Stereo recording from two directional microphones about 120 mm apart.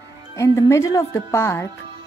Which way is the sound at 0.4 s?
25° left (ahead or behind).